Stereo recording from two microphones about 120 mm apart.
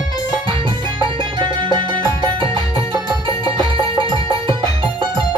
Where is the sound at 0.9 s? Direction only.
45° right (ahead or behind).